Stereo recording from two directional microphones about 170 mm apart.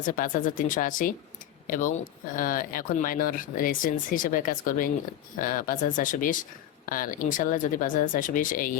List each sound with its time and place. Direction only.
0.1 s speech: 50° left (ahead or behind)